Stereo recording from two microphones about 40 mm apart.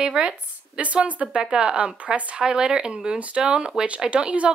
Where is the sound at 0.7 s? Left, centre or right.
Right.